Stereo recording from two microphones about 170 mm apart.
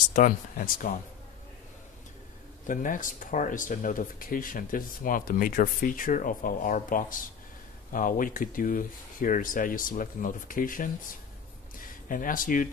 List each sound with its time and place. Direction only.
0.1 s speech: 50° left (ahead or behind)
2.6 s speech: 50° left (ahead or behind)
12.1 s speech: 55° left (ahead or behind)